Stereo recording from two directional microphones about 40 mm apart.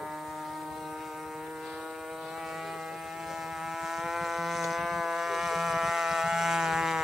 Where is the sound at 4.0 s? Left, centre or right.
Centre.